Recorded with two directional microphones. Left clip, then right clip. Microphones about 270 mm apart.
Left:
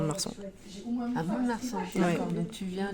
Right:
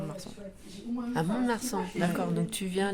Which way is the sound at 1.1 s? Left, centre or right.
Right.